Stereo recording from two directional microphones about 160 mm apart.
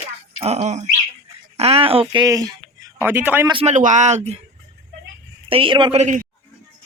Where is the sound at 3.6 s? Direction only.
50° right (ahead or behind).